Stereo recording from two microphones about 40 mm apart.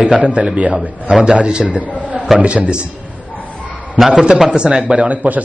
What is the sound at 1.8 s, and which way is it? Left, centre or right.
Speech, right.